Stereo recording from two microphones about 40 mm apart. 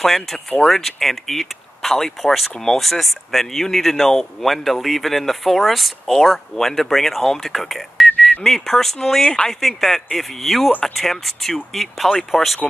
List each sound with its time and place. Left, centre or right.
0.0 s speech: centre
9.2 s speech: left
9.5 s speech: centre